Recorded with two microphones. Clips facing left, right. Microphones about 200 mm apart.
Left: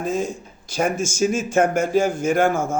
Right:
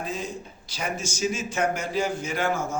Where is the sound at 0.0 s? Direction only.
45° left (ahead or behind).